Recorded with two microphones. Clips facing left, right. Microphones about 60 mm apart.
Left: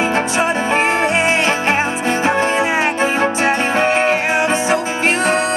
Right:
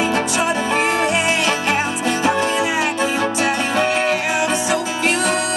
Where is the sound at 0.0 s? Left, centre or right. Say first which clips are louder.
Left 2 dB; left.